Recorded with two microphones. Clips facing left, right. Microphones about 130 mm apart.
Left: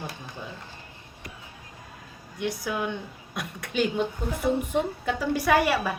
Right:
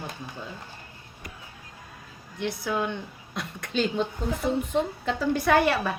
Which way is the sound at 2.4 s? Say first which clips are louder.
Right 1 dB; 10° left (ahead or behind).